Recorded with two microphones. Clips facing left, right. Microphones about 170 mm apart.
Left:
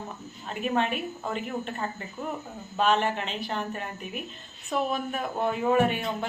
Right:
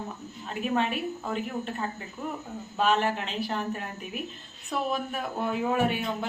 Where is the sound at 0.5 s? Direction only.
Centre (ahead or behind).